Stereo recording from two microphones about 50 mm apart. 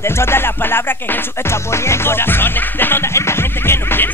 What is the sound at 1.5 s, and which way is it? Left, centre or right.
Music, left.